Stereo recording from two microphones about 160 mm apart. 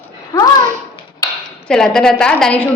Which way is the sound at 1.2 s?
25° left (ahead or behind).